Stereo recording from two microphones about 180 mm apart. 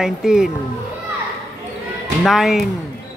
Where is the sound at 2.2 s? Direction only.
Centre (ahead or behind).